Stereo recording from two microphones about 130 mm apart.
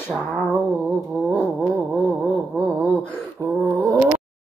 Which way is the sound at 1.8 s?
15° right (ahead or behind).